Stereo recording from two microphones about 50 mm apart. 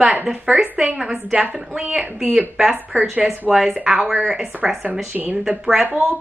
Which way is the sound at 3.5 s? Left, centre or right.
Centre.